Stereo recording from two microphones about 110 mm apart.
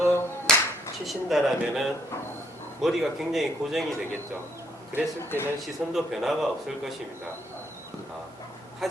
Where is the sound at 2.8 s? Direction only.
5° right (ahead or behind).